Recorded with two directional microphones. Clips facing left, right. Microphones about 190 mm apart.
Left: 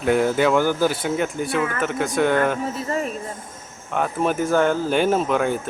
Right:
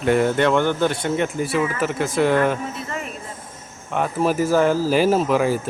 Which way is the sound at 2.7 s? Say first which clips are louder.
Left 5 dB; 40° left (ahead or behind).